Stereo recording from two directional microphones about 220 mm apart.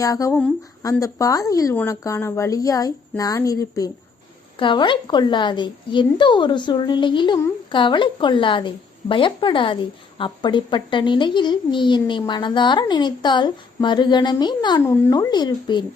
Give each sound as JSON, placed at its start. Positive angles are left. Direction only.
{"t": 0.0, "sound": "speech", "side_deg": 15}